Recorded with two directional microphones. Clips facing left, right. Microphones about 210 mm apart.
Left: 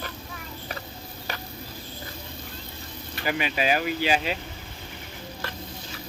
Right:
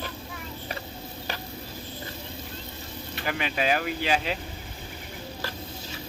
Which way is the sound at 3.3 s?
5° left (ahead or behind).